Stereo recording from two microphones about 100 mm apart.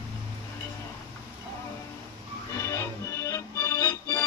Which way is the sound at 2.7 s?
30° left (ahead or behind).